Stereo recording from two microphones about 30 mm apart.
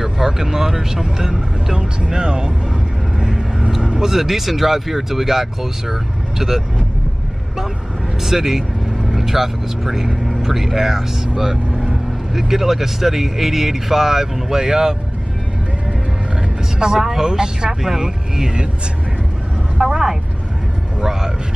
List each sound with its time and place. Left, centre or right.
0.0 s speech: centre
1.8 s speech: right
3.2 s vehicle: right
4.0 s speech: centre
8.2 s speech: centre
11.7 s vehicle: right
12.4 s speech: centre
16.8 s speech: centre
19.8 s speech: right
21.0 s a sound: centre